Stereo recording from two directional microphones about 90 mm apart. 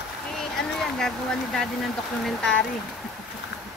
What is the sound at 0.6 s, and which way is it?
Speech, 5° left (ahead or behind).